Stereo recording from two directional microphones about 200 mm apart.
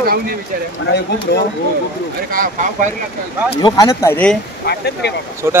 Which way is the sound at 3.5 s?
20° left (ahead or behind).